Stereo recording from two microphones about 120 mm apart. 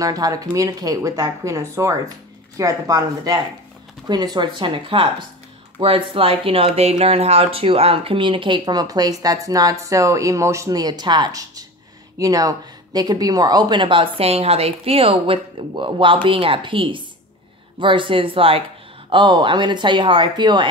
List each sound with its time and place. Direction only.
0.0 s speech: 30° right (ahead or behind)